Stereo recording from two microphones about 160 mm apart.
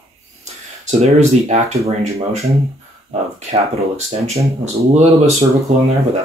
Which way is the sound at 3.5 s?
40° right (ahead or behind).